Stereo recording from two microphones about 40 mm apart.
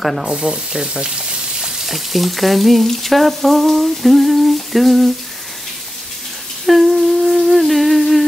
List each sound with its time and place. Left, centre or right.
0.0 s frying: centre
0.3 s frying: centre
1.9 s frying: centre
6.6 s humming: centre